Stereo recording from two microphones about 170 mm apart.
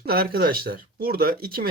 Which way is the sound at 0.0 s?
65° right (ahead or behind).